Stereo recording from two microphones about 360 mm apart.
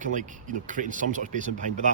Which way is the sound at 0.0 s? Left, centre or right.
Right.